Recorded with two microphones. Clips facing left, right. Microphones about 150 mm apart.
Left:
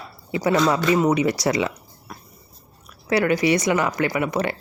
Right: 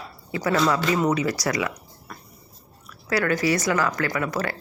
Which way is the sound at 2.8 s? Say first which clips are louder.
Left 4 dB; 20° left (ahead or behind).